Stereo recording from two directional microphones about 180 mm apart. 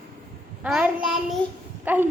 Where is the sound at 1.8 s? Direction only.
10° right (ahead or behind).